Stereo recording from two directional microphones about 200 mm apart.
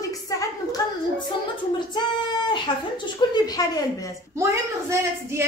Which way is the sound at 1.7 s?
20° left (ahead or behind).